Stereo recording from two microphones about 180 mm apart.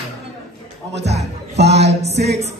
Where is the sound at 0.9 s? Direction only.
70° right (ahead or behind).